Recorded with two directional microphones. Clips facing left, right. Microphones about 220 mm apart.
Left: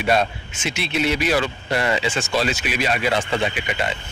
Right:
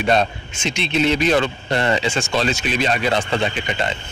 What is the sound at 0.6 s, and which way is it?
Speech, 5° left (ahead or behind).